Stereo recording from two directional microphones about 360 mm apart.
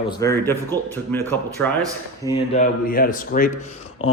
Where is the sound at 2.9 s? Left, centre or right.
Left.